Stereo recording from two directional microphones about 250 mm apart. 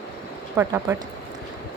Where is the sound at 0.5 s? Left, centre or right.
Centre.